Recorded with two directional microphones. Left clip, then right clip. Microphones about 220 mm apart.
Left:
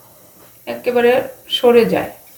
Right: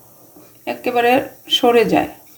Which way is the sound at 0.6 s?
50° right (ahead or behind).